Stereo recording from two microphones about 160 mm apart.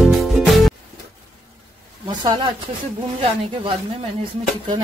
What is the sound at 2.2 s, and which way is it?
Speech, 25° right (ahead or behind).